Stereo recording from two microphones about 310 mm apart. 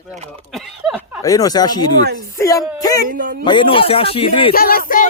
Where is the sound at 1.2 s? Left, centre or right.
Centre.